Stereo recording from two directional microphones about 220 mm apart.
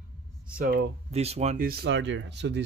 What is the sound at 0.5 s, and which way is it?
Speech, 45° right (ahead or behind).